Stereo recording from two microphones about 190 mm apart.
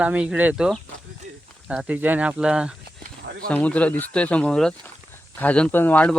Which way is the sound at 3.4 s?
5° left (ahead or behind).